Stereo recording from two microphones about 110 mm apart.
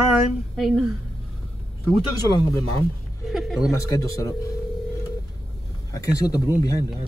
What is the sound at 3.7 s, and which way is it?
Speech, 30° left (ahead or behind).